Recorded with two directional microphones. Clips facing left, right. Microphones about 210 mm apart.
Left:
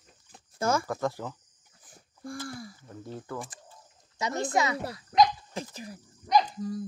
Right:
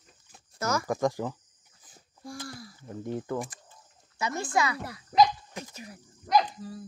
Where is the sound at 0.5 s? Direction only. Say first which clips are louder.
Left 3 dB; 30° left (ahead or behind).